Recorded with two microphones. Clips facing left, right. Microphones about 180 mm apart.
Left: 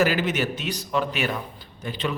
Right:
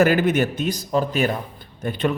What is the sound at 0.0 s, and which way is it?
Speech, 55° right (ahead or behind).